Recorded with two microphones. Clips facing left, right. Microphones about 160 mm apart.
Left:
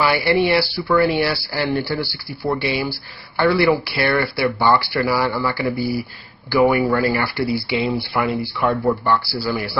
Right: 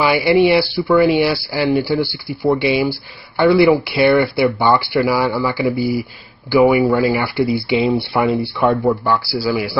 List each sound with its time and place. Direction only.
0.0 s speech: 15° right (ahead or behind)